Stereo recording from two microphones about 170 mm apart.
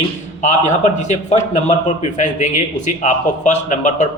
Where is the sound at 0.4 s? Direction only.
45° left (ahead or behind).